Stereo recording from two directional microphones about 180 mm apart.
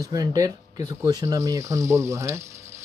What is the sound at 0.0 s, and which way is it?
Speech, 20° right (ahead or behind).